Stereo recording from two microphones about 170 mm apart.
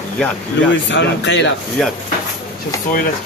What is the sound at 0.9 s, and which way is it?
Speech, 90° left.